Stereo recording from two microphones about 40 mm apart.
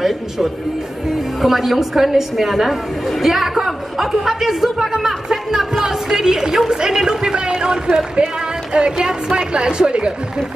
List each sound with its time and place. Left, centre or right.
0.0 s a woman's voice: centre
4.8 s a sound: centre
8.7 s speech: right